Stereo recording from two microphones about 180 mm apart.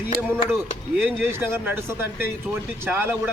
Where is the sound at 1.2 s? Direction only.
10° right (ahead or behind).